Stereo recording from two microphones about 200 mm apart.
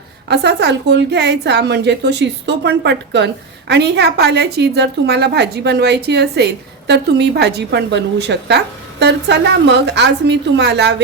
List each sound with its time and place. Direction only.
0.3 s a woman's voice: 60° right (ahead or behind)